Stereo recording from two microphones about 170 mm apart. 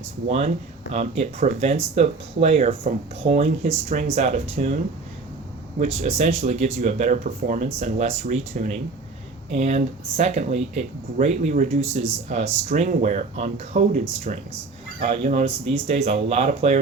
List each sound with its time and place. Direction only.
0.3 s speech: 40° right (ahead or behind)
5.8 s speech: 40° right (ahead or behind)